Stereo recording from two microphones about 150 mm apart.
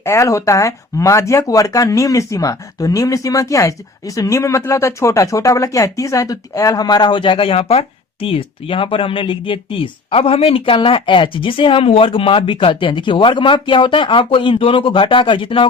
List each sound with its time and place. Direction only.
0.0 s speech: 20° left (ahead or behind); by 15.6 s 35° left (ahead or behind)